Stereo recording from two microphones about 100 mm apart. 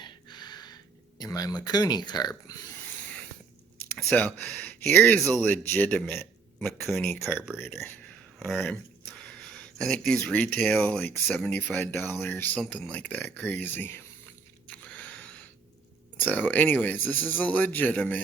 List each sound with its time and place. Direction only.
0.0 s a sound: 45° left (ahead or behind)
1.2 s speech: 35° left (ahead or behind)
3.9 s speech: 10° left (ahead or behind)
6.6 s speech: centre (ahead or behind)
7.1 s speech: 20° left (ahead or behind)
9.2 s a sound: 10° left (ahead or behind)
10.2 s speech: 15° left (ahead or behind)
14.7 s biting: 15° left (ahead or behind)
16.2 s speech: 15° left (ahead or behind)